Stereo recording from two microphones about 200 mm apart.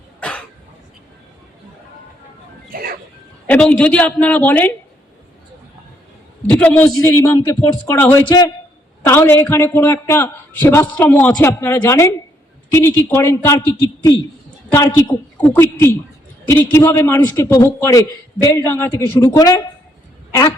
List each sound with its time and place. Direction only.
0.2 s cough: 5° left (ahead or behind)
2.6 s music: 45° right (ahead or behind)
3.4 s a man's voice: 5° left (ahead or behind)
6.5 s a man's voice: 10° left (ahead or behind)